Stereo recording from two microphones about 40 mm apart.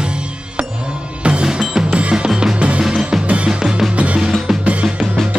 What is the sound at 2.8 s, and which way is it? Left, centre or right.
Music, centre.